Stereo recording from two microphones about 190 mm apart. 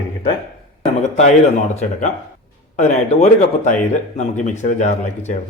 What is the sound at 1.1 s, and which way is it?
Speech, 40° left (ahead or behind).